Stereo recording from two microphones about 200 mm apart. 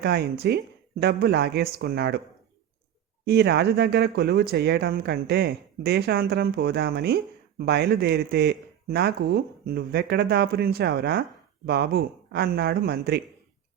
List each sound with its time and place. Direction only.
0.0 s speech: 55° right (ahead or behind)
3.2 s a man's voice: 55° right (ahead or behind)